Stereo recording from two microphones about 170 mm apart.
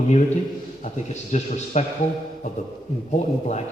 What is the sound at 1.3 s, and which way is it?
Speech, 45° left (ahead or behind).